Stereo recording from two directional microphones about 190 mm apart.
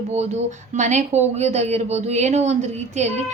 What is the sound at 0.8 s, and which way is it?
Speech, 40° right (ahead or behind).